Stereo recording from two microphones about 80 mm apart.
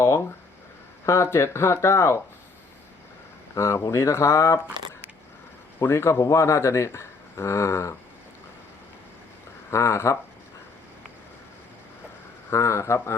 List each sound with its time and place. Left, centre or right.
0.0 s speech: left
3.5 s speech: left
5.8 s speech: left
9.6 s speech: left
12.5 s speech: left